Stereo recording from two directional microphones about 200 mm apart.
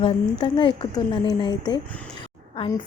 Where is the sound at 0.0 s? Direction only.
25° left (ahead or behind).